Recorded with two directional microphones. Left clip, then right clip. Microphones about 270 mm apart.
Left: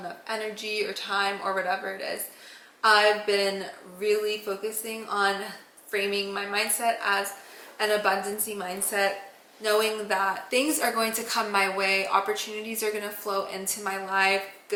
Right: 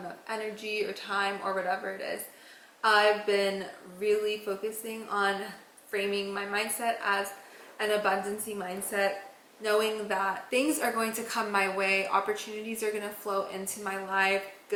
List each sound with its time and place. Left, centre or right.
0.3 s a woman's voice: centre
13.2 s a woman's voice: centre
13.5 s a woman's voice: centre